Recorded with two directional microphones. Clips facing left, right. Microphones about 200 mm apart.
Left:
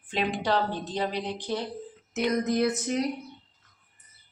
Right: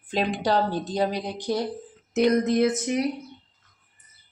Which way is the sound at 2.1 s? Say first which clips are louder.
Right 6 dB; 25° right (ahead or behind).